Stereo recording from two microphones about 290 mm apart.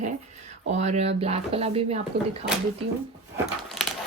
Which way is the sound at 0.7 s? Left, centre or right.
Right.